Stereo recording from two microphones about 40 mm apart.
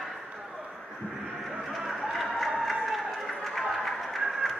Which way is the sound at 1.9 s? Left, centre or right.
Centre.